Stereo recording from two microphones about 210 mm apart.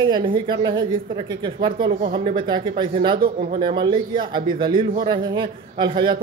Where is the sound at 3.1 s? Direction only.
45° right (ahead or behind).